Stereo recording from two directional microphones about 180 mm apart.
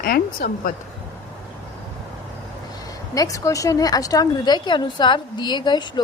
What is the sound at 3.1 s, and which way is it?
Speech, 20° left (ahead or behind).